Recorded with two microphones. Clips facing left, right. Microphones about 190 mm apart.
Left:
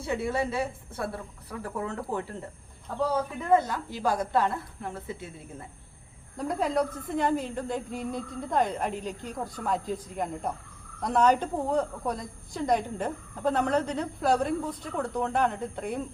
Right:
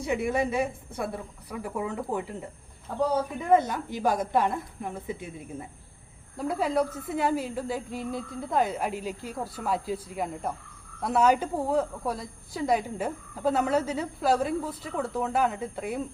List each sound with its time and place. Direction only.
0.0 s a woman's voice: 15° right (ahead or behind)
6.3 s a woman's voice: 5° right (ahead or behind)